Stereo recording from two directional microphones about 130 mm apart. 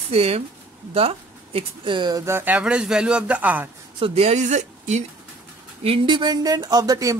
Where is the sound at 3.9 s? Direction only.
50° right (ahead or behind).